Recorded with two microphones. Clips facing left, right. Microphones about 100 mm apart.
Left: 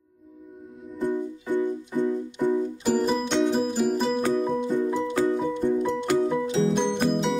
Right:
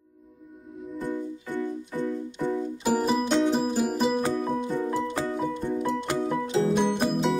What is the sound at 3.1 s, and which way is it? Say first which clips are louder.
Music: even; 5° right (ahead or behind).